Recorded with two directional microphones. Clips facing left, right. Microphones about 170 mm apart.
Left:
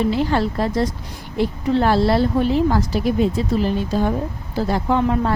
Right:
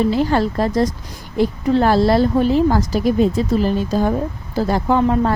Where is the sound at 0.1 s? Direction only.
40° right (ahead or behind).